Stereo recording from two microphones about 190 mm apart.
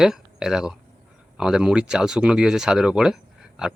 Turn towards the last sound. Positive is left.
turn(degrees=-5)  # may be behind; listen again after turning